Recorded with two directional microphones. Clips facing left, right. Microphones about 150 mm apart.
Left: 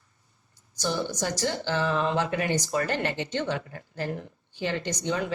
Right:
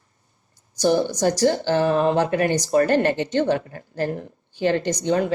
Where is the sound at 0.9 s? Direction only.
45° right (ahead or behind).